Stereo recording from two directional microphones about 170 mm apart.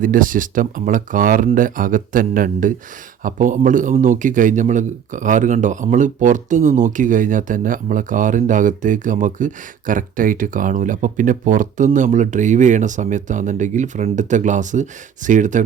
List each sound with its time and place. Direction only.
0.0 s a man's voice: 55° right (ahead or behind)